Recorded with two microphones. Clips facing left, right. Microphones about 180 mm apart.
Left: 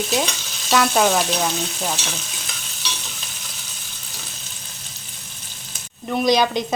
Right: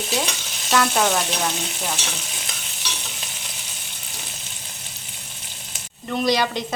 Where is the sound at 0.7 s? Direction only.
10° left (ahead or behind).